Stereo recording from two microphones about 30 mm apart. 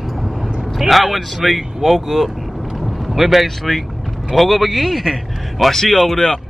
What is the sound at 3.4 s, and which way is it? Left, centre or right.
Speech, centre.